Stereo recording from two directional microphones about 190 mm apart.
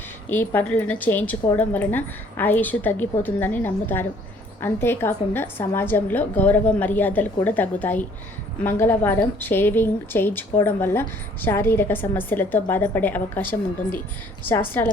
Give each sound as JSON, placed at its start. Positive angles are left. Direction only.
{"t": 0.3, "sound": "a woman's voice", "side_deg": 10}